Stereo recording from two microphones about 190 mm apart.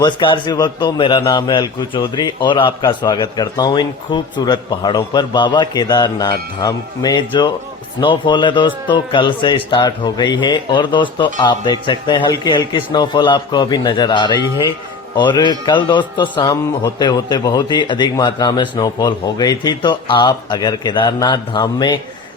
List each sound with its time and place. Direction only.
0.0 s a man's voice: 25° left (ahead or behind)